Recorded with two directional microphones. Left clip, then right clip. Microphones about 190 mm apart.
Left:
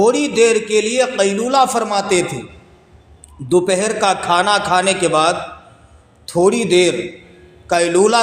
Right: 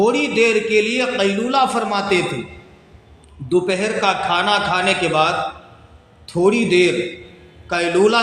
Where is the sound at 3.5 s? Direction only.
55° left (ahead or behind).